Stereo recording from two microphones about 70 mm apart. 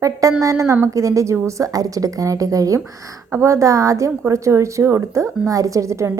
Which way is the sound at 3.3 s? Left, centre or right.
Right.